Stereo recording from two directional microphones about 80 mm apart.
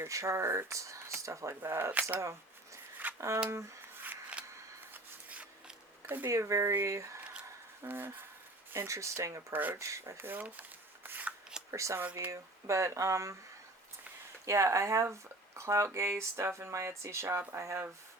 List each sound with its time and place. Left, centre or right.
0.0 s speech: right
1.9 s speech: centre
3.2 s speech: right
3.5 s shuffling cards: right
5.3 s scissors: centre
6.2 s speech: right
7.9 s speech: right
9.5 s speech: right
9.7 s speech: right
11.0 s shuffling cards: right
11.7 s speech: right
14.4 s speech: right